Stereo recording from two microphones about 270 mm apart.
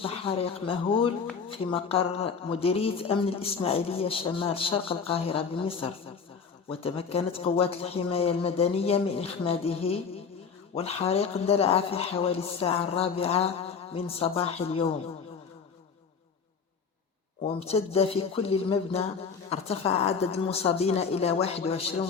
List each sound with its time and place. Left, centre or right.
0.0 s speech: left
17.4 s speech: left